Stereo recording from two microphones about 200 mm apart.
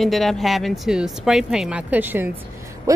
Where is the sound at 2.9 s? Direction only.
15° right (ahead or behind).